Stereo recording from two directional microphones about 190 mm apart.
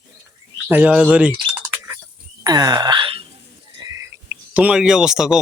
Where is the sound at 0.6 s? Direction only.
10° right (ahead or behind).